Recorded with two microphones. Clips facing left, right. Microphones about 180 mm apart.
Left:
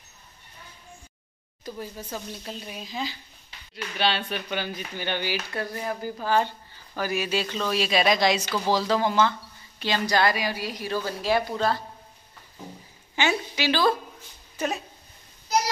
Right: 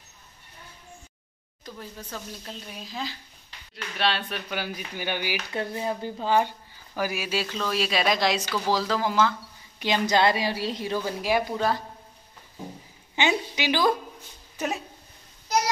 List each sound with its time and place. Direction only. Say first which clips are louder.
1.6 s speech: left 4 dB; 10° left (ahead or behind); by 6.5 s 20° right (ahead or behind)
7.0 s speech: left 1 dB; 5° right (ahead or behind)
9.8 s a woman's voice: right 1 dB; 20° right (ahead or behind)
11.0 s speech: left 1 dB; 15° right (ahead or behind)
13.1 s a woman's voice: right 1 dB; 20° right (ahead or behind)